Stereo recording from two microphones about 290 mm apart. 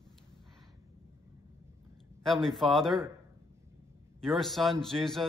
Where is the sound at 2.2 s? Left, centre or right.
Centre.